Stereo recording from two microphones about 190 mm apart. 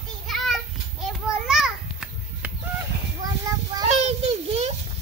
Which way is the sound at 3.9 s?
35° right (ahead or behind).